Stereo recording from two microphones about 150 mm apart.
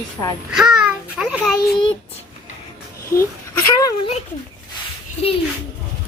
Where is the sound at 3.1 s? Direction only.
20° left (ahead or behind).